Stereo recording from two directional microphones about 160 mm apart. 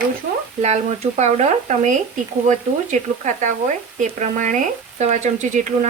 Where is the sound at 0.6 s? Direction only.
45° right (ahead or behind).